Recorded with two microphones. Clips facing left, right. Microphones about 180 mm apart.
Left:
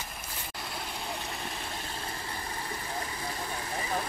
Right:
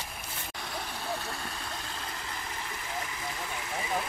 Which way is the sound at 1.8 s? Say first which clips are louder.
Left 1 dB; 30° left (ahead or behind).